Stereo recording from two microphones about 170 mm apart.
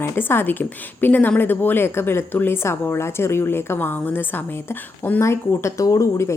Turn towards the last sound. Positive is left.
turn(degrees=15)  # may be behind; listen again after turning